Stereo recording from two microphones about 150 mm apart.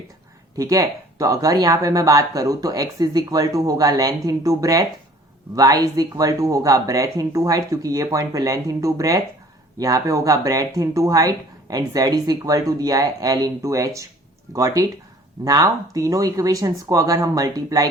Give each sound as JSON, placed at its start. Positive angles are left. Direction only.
{"t": 0.5, "sound": "speech", "side_deg": -25}